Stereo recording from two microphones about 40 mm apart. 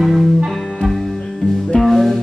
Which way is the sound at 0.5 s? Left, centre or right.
Centre.